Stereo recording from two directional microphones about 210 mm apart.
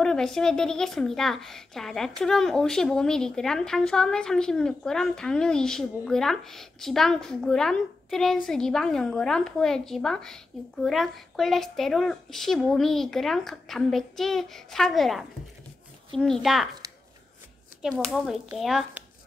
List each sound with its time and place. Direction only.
0.0 s speech: 5° left (ahead or behind)
16.8 s shuffling cards: 15° right (ahead or behind)
17.8 s speech: centre (ahead or behind)